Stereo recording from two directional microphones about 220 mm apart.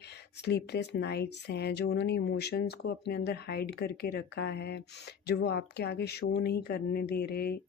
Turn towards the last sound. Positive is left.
turn(degrees=45)  # may be behind; listen again after turning